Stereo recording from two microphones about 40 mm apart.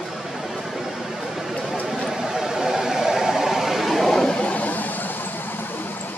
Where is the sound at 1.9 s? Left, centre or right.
Centre.